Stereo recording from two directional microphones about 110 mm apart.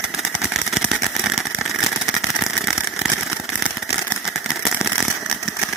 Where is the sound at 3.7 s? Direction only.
5° right (ahead or behind).